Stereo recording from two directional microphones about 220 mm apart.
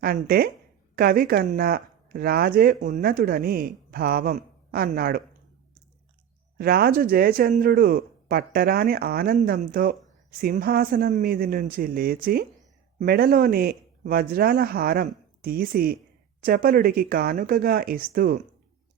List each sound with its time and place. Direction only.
0.0 s speech: 45° right (ahead or behind)
6.6 s speech: 45° right (ahead or behind)